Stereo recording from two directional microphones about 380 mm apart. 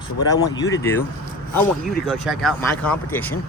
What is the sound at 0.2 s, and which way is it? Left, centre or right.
Speech, centre.